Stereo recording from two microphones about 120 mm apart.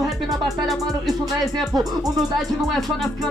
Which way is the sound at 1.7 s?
30° right (ahead or behind).